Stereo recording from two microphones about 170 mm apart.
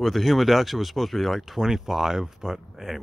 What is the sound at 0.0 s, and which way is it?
Speech, centre (ahead or behind).